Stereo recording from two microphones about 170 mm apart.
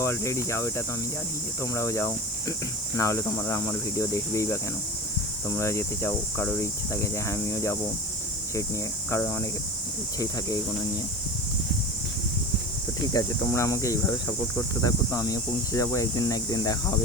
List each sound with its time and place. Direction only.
0.0 s speech: 15° left (ahead or behind)
13.1 s speech: 15° left (ahead or behind)